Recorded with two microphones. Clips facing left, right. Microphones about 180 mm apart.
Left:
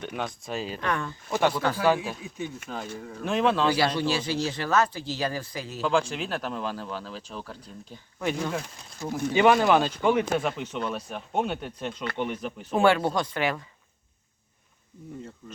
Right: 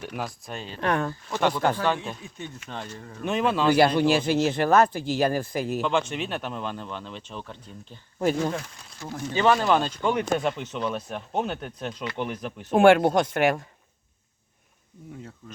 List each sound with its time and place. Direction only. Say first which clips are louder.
0.0 s speech: left 1 dB; centre (ahead or behind)
0.8 s speech: right 8 dB; 55° right (ahead or behind)
1.8 s speech: left 3 dB; 10° left (ahead or behind)
3.8 s a man's voice: right 6 dB; 55° right (ahead or behind)
5.8 s speech: even; 5° right (ahead or behind)
8.2 s speech: right 5 dB; 40° right (ahead or behind)
9.0 s speech: left 2 dB; 15° left (ahead or behind); by 12.6 s centre (ahead or behind)
12.7 s speech: right 5 dB; 50° right (ahead or behind)